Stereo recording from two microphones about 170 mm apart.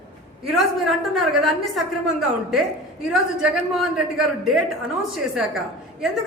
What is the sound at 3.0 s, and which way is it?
A man's voice, centre (ahead or behind).